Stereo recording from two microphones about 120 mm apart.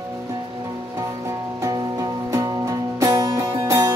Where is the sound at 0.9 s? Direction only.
25° right (ahead or behind).